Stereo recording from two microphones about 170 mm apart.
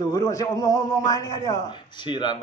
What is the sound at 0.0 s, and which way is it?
Speech, 20° left (ahead or behind).